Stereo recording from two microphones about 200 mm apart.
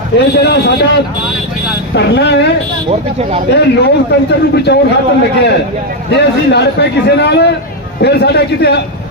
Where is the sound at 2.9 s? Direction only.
30° right (ahead or behind).